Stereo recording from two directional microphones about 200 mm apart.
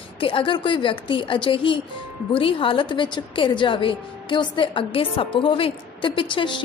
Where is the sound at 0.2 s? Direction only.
25° left (ahead or behind).